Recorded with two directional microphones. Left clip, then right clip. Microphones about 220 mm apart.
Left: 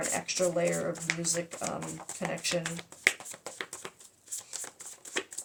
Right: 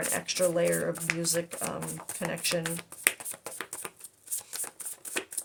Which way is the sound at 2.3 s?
40° right (ahead or behind).